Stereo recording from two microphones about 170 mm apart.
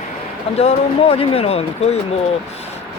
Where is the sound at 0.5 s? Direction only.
40° left (ahead or behind).